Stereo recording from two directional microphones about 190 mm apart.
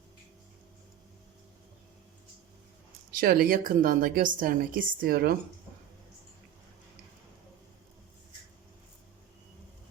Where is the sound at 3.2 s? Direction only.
50° right (ahead or behind).